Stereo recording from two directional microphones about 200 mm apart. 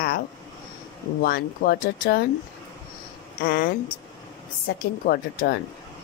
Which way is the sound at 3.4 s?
50° left (ahead or behind).